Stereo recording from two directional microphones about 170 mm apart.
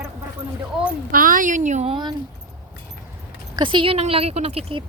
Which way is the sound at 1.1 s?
55° right (ahead or behind).